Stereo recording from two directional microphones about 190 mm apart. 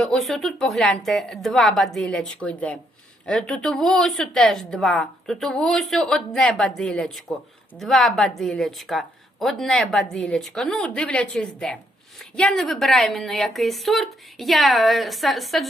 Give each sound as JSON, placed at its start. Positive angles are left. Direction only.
{"t": 0.0, "sound": "a woman's voice", "side_deg": 5}